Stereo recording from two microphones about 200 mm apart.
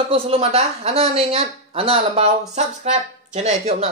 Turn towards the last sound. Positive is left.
turn(degrees=-35)  # may be behind; listen again after turning